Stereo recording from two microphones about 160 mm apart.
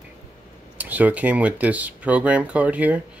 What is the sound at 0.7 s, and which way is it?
Speech, 10° right (ahead or behind).